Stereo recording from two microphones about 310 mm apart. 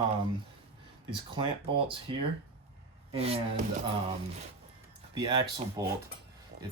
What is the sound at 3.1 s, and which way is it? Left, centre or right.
Speech, centre.